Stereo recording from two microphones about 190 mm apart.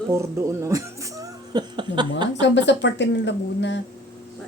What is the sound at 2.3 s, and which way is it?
Speech, 70° left (ahead or behind).